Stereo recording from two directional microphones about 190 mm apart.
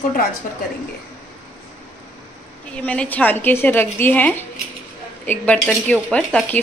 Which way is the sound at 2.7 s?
5° left (ahead or behind).